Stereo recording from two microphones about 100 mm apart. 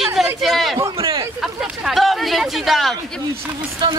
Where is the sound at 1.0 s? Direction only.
45° right (ahead or behind).